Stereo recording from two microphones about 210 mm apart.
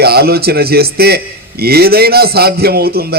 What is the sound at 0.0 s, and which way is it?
A man's voice, 50° right (ahead or behind).